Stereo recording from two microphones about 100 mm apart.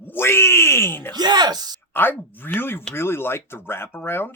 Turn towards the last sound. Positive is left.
turn(degrees=20)  # may be behind; listen again after turning